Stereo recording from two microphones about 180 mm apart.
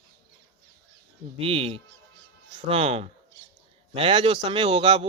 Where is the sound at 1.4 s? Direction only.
30° right (ahead or behind).